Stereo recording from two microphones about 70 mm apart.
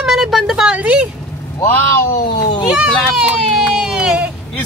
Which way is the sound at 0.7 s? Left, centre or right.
Centre.